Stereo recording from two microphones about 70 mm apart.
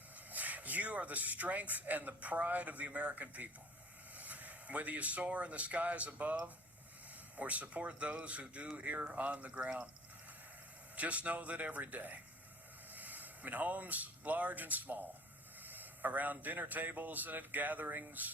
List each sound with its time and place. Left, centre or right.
0.3 s speech: right
7.3 s speech: right
10.9 s speech: right